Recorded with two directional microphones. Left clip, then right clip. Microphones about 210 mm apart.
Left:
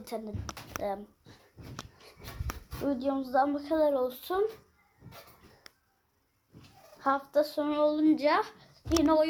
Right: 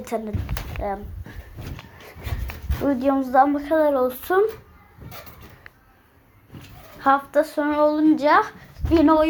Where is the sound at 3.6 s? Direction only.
15° left (ahead or behind).